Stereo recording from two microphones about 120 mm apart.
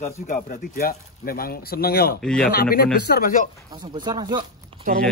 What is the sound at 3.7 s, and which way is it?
Speech, 35° right (ahead or behind).